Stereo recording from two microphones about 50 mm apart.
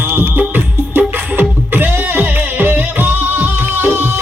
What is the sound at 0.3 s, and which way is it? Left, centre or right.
Music, right.